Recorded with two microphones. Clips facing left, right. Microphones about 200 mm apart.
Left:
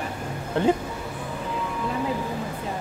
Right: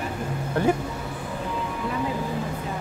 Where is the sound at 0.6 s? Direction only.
20° left (ahead or behind).